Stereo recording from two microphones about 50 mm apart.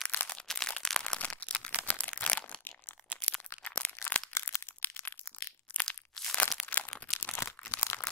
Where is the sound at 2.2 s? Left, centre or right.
Left.